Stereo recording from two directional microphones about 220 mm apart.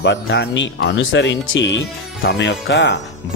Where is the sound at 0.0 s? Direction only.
50° left (ahead or behind).